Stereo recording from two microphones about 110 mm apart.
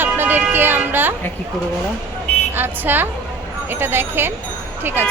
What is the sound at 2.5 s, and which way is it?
Speech, 20° right (ahead or behind).